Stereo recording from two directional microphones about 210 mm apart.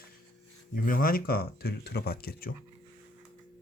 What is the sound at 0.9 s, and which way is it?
Speech, 45° left (ahead or behind).